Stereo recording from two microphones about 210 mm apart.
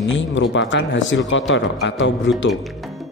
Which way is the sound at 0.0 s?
60° left (ahead or behind).